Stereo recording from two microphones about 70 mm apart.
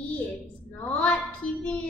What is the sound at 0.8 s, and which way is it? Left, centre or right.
A woman's voice, centre.